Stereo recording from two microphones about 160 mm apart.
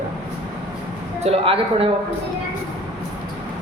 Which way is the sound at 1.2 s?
35° right (ahead or behind).